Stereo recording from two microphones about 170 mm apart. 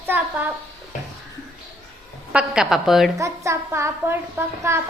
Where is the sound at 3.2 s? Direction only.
15° right (ahead or behind).